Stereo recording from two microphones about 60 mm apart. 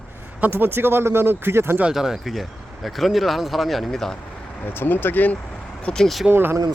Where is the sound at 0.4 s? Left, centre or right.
Right.